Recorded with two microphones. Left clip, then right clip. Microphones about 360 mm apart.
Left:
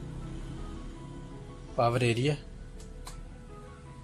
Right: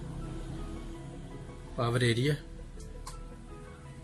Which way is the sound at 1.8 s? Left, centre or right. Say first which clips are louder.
Left 3 dB; centre.